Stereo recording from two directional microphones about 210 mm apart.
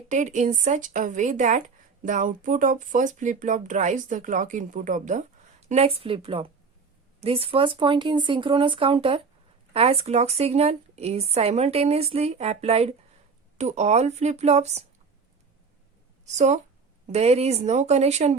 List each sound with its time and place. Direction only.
0.1 s speech: 35° right (ahead or behind)
16.2 s speech: 35° right (ahead or behind)